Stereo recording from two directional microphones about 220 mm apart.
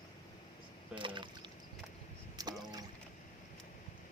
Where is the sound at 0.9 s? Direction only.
20° right (ahead or behind).